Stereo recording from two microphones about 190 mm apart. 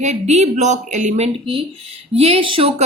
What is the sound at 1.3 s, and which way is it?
A woman's voice, 25° right (ahead or behind).